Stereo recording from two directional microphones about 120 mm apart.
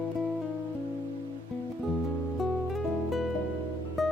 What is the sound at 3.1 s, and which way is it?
Music, centre (ahead or behind).